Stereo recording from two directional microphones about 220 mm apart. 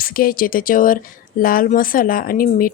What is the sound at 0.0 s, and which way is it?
A woman's voice, 40° left (ahead or behind).